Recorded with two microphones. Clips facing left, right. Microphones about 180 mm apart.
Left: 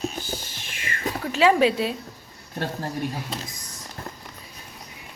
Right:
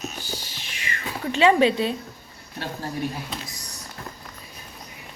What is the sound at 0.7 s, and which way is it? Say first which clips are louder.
Music: even; 45° left (ahead or behind).